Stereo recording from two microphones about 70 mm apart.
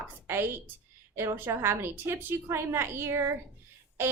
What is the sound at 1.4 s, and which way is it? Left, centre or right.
A woman's voice, right.